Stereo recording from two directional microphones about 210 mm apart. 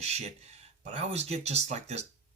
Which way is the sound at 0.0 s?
30° right (ahead or behind).